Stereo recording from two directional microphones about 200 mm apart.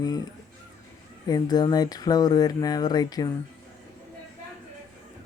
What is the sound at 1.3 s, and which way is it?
Speech, 20° left (ahead or behind).